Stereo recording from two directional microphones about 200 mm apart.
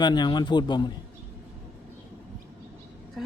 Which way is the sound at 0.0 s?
20° left (ahead or behind).